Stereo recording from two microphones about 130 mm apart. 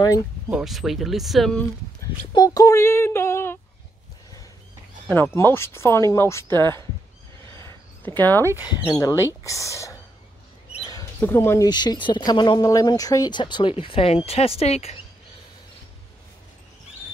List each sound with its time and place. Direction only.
0.5 s speech: 5° right (ahead or behind)
2.3 s speech: 30° left (ahead or behind)
5.1 s speech: 15° left (ahead or behind)
7.6 s a sound: 15° left (ahead or behind)
8.6 s speech: 30° left (ahead or behind)
10.9 s bird: 25° left (ahead or behind)
11.7 s speech: 35° left (ahead or behind); by 15.0 s 50° left (ahead or behind)